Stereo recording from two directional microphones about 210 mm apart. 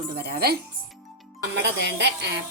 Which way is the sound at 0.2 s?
50° right (ahead or behind).